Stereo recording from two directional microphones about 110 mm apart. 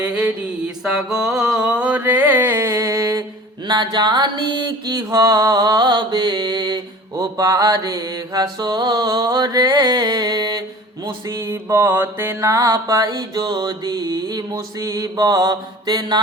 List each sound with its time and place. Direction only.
0.1 s mantra: 15° right (ahead or behind)
0.9 s carnatic music: 5° right (ahead or behind); by 3.2 s 35° right (ahead or behind)
3.7 s mantra: 40° right (ahead or behind)
11.3 s mantra: 25° right (ahead or behind); by 16.2 s 40° right (ahead or behind)